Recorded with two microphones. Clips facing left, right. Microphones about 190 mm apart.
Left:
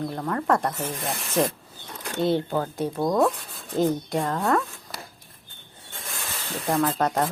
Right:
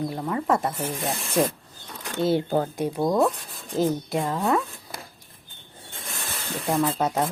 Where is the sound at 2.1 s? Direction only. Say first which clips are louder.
Right 1 dB; 5° right (ahead or behind).